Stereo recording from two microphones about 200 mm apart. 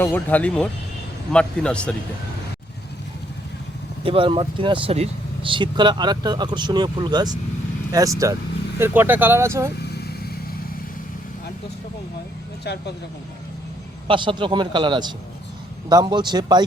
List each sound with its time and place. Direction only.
0.0 s speech: 10° left (ahead or behind)
4.0 s speech: 25° right (ahead or behind)
12.6 s speech: 55° left (ahead or behind)
14.1 s speech: 25° right (ahead or behind)